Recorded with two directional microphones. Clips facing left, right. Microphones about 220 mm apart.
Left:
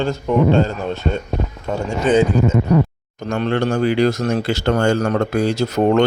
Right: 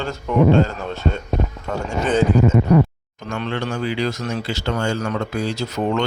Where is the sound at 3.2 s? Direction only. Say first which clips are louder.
Left 6 dB; 40° left (ahead or behind).